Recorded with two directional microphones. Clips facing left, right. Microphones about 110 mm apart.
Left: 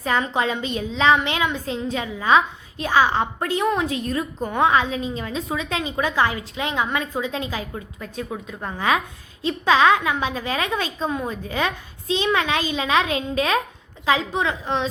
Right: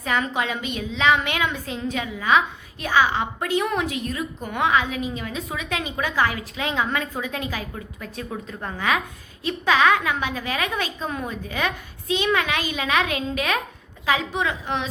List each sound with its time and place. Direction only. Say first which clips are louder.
0.0 s a woman's voice: left 2 dB; 30° left (ahead or behind); by 8.5 s 15° left (ahead or behind)
8.6 s a woman's voice: left 2 dB; 25° left (ahead or behind)